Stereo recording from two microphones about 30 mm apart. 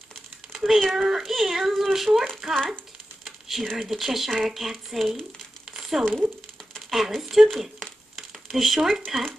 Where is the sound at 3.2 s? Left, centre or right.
Centre.